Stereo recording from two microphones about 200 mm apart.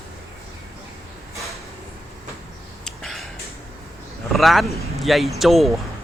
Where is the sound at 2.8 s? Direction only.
Centre (ahead or behind).